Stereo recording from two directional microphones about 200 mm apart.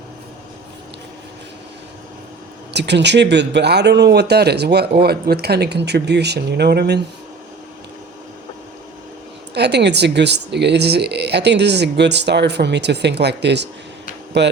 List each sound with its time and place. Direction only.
2.7 s speech: 60° right (ahead or behind)
9.6 s speech: 55° right (ahead or behind)